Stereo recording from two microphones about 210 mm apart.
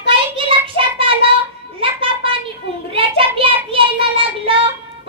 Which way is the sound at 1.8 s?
25° right (ahead or behind).